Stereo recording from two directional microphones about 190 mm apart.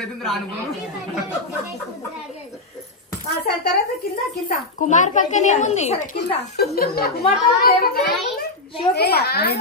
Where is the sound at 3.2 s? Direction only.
60° left (ahead or behind).